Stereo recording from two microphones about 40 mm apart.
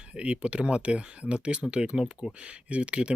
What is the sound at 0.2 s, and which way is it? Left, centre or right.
Speech, right.